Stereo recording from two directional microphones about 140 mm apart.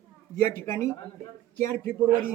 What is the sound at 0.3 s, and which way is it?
Speech, 20° left (ahead or behind).